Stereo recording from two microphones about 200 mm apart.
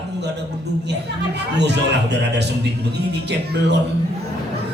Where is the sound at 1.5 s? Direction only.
60° right (ahead or behind).